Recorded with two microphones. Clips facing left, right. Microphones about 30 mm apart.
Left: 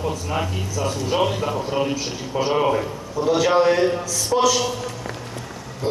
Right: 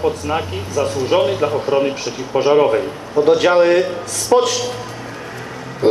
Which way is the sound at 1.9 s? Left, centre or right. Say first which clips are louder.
Right 5 dB; right.